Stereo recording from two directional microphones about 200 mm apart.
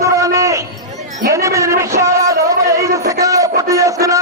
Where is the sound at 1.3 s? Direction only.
15° right (ahead or behind).